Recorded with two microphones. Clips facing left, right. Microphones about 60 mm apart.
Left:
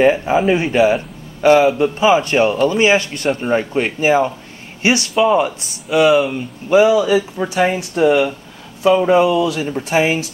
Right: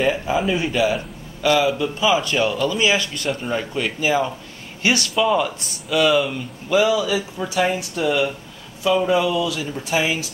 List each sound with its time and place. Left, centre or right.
0.0 s a man's voice: left
4.8 s a man's voice: left